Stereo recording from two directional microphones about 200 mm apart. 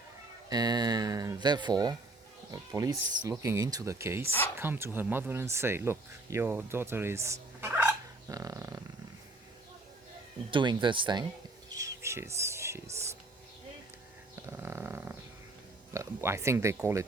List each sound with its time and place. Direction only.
0.5 s speech: 20° right (ahead or behind)
7.6 s dog: 10° right (ahead or behind)
10.5 s speech: 25° right (ahead or behind)
11.7 s a sound: 15° right (ahead or behind)
14.4 s speech: 10° right (ahead or behind)